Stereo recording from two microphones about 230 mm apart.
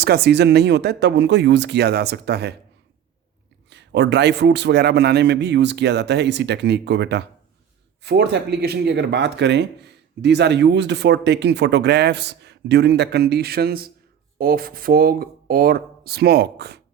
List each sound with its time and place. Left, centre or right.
0.0 s speech: right
3.7 s speech: right